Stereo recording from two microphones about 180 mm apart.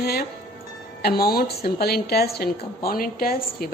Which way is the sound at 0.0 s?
60° left (ahead or behind).